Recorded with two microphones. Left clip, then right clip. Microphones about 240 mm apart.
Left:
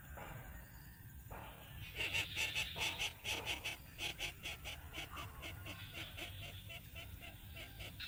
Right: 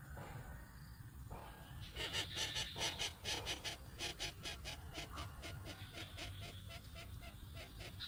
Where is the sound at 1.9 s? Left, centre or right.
Right.